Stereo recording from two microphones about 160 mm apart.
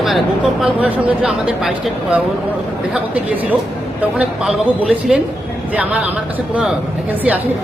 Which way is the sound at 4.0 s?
5° right (ahead or behind).